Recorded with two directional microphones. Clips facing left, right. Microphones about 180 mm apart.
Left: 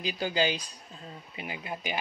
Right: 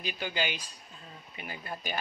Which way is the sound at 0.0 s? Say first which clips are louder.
Left 5 dB; 30° left (ahead or behind).